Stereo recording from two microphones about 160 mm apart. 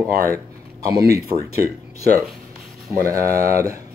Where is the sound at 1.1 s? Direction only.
20° right (ahead or behind).